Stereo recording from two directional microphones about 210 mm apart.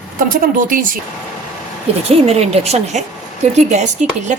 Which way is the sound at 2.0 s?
30° right (ahead or behind).